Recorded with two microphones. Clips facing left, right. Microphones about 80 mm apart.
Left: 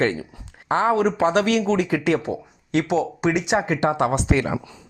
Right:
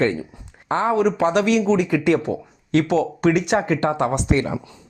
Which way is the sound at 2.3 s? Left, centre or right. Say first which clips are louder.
Right 3 dB; centre.